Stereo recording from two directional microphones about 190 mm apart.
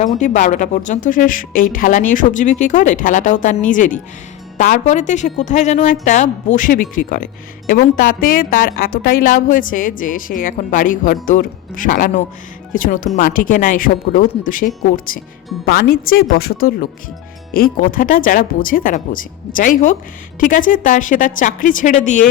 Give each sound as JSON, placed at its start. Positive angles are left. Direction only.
{"t": 0.2, "sound": "a woman's voice", "side_deg": 40}